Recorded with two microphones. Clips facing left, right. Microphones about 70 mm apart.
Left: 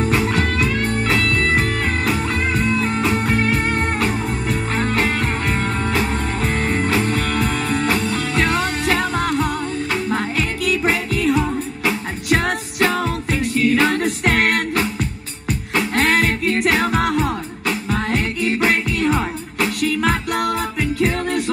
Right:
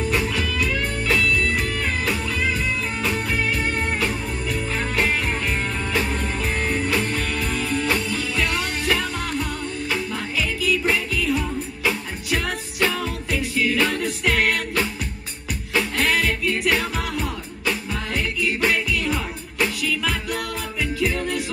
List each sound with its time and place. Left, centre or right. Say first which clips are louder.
0.0 s music: left 5 dB; left
15.9 s music: left 6 dB; left